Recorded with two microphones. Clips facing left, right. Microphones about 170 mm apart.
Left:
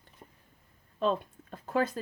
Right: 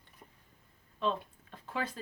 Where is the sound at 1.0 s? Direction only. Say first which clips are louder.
Left 5 dB; 45° left (ahead or behind).